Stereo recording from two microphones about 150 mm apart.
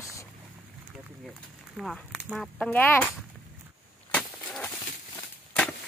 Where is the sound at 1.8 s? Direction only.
Centre (ahead or behind).